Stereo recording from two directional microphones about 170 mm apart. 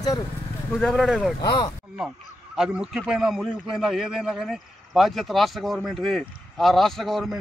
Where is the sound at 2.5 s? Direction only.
5° right (ahead or behind).